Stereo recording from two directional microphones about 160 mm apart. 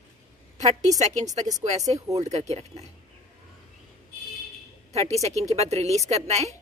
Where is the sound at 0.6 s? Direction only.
45° right (ahead or behind).